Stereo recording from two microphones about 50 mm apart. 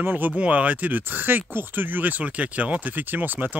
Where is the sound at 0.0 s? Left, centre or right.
Right.